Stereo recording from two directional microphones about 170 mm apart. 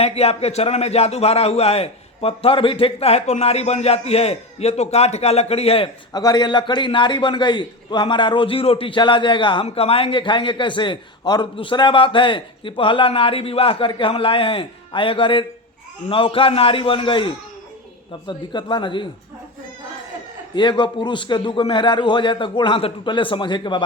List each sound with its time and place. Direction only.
0.0 s a man's voice: 35° left (ahead or behind)
20.6 s a man's voice: 25° left (ahead or behind)